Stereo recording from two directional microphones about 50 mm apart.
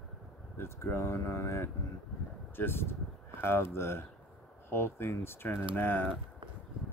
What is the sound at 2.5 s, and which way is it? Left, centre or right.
Speech, left.